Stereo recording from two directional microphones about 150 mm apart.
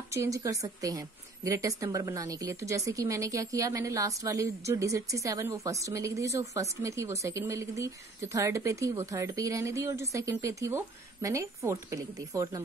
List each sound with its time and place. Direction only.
0.1 s speech: 20° right (ahead or behind)